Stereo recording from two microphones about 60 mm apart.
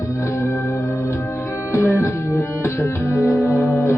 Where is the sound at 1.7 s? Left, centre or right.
Left.